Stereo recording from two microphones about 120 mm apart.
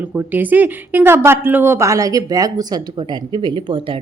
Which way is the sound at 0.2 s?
15° right (ahead or behind).